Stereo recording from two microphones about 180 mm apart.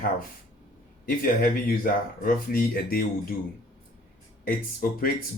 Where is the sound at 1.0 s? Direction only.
50° left (ahead or behind).